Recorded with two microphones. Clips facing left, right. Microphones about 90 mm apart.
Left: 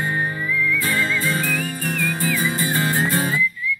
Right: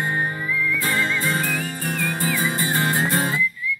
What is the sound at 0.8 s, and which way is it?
Music, 35° right (ahead or behind).